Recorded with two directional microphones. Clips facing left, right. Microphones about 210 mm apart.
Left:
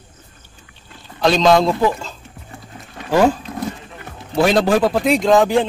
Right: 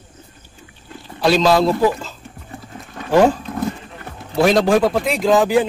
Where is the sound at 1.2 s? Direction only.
5° right (ahead or behind).